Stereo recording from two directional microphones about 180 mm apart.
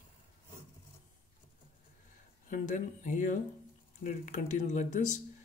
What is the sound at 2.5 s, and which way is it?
Speech, 45° left (ahead or behind).